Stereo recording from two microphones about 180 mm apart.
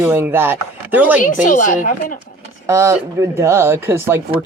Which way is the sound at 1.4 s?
45° left (ahead or behind).